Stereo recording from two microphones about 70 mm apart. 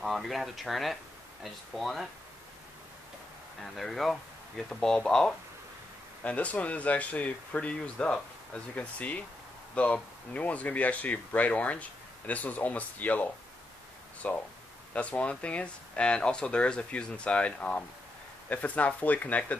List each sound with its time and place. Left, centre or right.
0.0 s speech: centre
3.6 s speech: centre
10.3 s speech: left